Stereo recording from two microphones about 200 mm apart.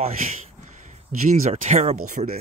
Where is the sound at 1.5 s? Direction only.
35° right (ahead or behind).